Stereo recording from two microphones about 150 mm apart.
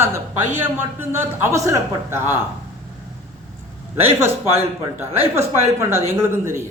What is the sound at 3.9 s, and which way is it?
Speech, 15° right (ahead or behind).